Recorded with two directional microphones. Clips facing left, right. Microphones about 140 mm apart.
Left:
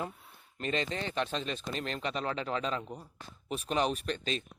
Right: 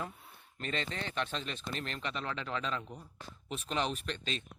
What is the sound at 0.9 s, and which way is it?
Speech, 35° left (ahead or behind).